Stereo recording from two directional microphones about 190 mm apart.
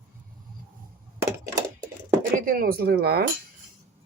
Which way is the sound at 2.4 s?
50° right (ahead or behind).